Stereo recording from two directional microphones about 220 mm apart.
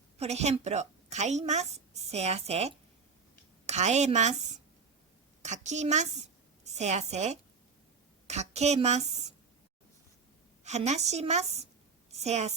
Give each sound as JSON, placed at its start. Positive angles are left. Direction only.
{"t": 0.2, "sound": "a woman's voice", "side_deg": -30}
{"t": 10.6, "sound": "a woman's voice", "side_deg": -30}